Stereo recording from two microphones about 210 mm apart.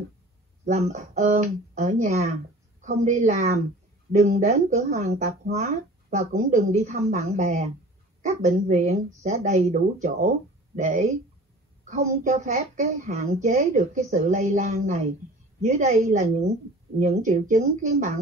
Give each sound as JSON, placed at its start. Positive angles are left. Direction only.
{"t": 0.7, "sound": "a woman's voice", "side_deg": -30}
{"t": 11.8, "sound": "a woman's voice", "side_deg": -35}